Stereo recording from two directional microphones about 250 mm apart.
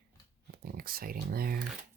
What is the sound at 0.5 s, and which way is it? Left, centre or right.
Speech, right.